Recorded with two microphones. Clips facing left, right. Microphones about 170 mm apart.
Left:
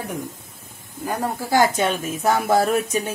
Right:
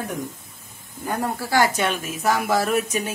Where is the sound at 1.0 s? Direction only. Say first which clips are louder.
Left 1 dB; 10° left (ahead or behind).